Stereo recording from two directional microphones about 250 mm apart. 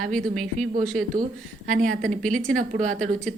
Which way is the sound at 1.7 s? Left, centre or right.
Right.